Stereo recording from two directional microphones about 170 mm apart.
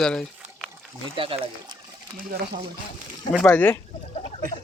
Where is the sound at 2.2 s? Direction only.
65° right (ahead or behind).